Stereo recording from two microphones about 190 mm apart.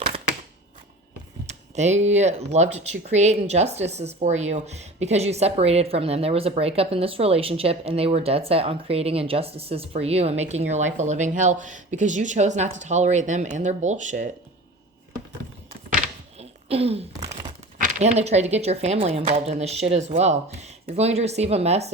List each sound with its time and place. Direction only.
1.5 s speech: 35° right (ahead or behind)
16.4 s throat clearing: 30° right (ahead or behind)
18.0 s speech: 35° right (ahead or behind)